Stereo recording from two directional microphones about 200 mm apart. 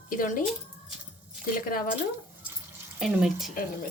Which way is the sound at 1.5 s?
45° left (ahead or behind).